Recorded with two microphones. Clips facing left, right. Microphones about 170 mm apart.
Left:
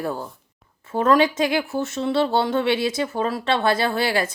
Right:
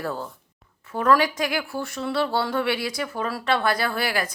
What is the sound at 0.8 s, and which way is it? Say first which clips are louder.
A woman's voice: left 3 dB; 25° left (ahead or behind).